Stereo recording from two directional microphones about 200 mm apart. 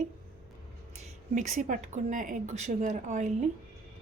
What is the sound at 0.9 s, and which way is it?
Speech, 35° right (ahead or behind).